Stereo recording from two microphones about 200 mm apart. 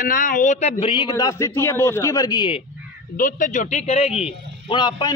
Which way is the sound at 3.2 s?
40° left (ahead or behind).